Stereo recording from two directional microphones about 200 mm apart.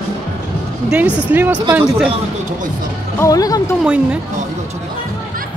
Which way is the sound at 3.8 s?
5° right (ahead or behind).